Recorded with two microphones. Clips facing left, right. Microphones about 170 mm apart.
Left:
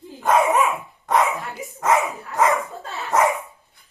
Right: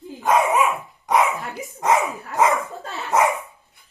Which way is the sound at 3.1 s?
20° right (ahead or behind).